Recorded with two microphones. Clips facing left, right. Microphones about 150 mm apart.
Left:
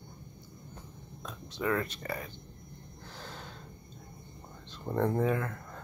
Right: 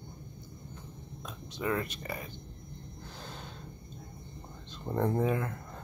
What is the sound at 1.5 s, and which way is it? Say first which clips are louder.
Speech: left 1 dB; 20° right (ahead or behind).